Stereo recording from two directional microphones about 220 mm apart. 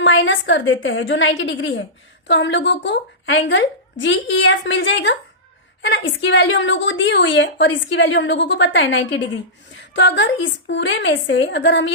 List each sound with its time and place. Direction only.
0.0 s a woman's voice: 55° left (ahead or behind)